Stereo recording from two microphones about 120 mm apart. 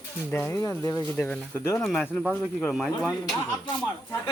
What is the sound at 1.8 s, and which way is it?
Speech, centre (ahead or behind).